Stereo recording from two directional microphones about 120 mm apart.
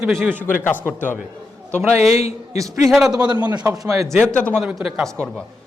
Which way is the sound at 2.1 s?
60° left (ahead or behind).